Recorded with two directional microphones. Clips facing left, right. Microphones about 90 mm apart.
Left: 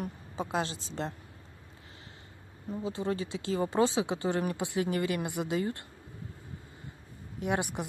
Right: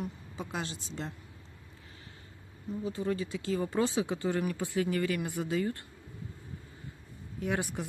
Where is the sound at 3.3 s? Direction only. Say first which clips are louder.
Left 5 dB; 30° left (ahead or behind).